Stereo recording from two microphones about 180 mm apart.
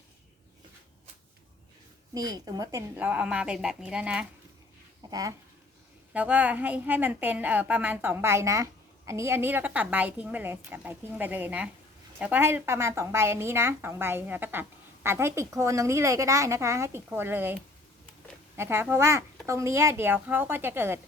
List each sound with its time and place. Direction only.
2.1 s a woman's voice: 20° right (ahead or behind)
6.1 s a woman's voice: 10° right (ahead or behind)